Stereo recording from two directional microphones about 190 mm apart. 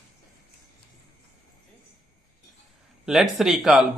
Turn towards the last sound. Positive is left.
turn(degrees=0)  # may be behind; listen again after turning